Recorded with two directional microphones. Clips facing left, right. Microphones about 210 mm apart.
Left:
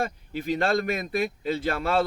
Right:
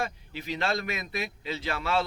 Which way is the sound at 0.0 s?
50° left (ahead or behind).